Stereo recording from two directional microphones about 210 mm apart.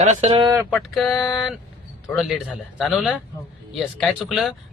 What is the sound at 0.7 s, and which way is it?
A man's voice, centre (ahead or behind).